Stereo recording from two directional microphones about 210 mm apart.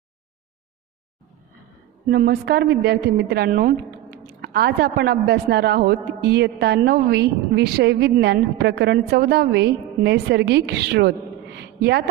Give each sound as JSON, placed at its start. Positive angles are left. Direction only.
{"t": 2.0, "sound": "a woman's voice", "side_deg": -50}